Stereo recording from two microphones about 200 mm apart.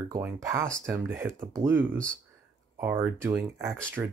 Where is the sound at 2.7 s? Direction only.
15° right (ahead or behind).